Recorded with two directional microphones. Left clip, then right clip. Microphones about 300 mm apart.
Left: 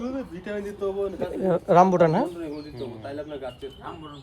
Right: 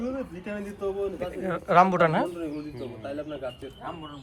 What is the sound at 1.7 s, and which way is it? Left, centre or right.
Speech, centre.